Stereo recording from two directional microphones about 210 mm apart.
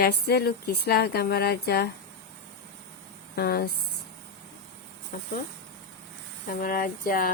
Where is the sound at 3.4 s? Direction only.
45° left (ahead or behind).